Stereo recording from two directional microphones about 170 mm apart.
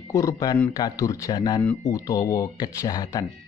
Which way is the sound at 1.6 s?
15° left (ahead or behind).